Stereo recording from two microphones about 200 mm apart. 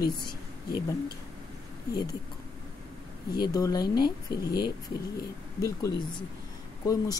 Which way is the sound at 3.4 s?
20° left (ahead or behind).